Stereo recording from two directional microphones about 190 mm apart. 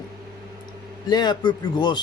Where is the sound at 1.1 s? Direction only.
20° left (ahead or behind).